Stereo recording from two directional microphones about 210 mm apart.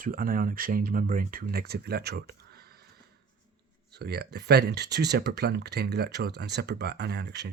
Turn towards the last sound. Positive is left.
turn(degrees=-55)  # may be behind; listen again after turning